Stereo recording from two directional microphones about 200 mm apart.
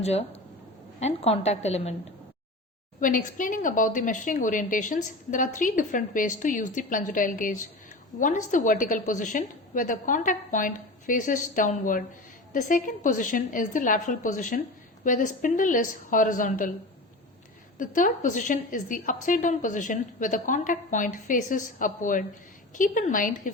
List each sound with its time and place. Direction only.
0.0 s speech: 30° left (ahead or behind)
3.0 s speech: 40° left (ahead or behind)
17.7 s speech: 40° left (ahead or behind)